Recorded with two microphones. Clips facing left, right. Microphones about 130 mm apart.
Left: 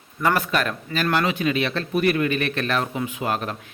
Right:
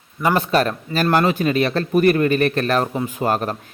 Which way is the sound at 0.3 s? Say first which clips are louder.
Right 5 dB; 30° right (ahead or behind).